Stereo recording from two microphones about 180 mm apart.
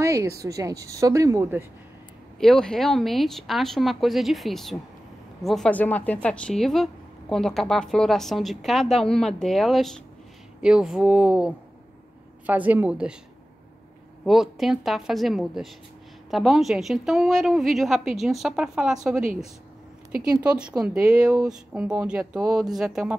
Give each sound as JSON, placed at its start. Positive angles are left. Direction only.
{"t": 0.0, "sound": "a sound", "side_deg": -15}
{"t": 0.4, "sound": "a woman's voice", "side_deg": -20}
{"t": 2.4, "sound": "a woman's voice", "side_deg": 5}
{"t": 14.2, "sound": "a woman's voice", "side_deg": 0}
{"t": 20.3, "sound": "a woman's voice", "side_deg": -5}